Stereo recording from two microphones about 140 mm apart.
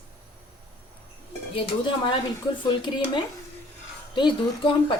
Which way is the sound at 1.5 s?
35° left (ahead or behind).